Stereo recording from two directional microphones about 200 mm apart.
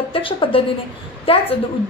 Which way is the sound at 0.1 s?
25° left (ahead or behind).